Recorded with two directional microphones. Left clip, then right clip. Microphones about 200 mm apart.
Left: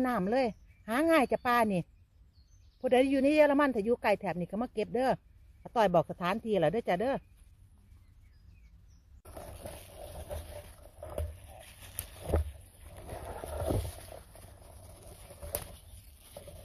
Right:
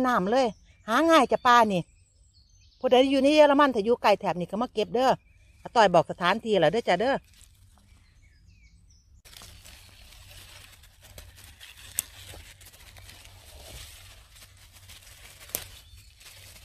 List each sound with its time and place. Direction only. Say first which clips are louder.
0.0 s speech: right 6 dB; 20° right (ahead or behind)